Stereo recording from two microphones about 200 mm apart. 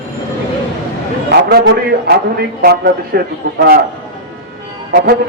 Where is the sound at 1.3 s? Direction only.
55° right (ahead or behind).